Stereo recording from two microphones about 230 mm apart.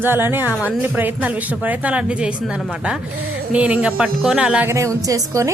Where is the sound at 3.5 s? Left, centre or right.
Centre.